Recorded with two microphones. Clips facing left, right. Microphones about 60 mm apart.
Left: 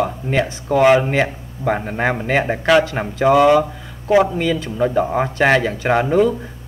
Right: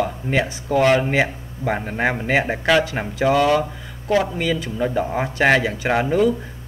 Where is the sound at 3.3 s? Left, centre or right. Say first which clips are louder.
Left 5 dB; centre.